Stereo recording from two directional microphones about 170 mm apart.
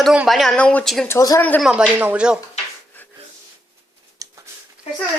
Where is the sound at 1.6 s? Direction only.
5° right (ahead or behind).